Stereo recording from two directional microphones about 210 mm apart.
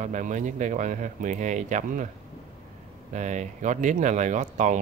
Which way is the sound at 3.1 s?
35° right (ahead or behind).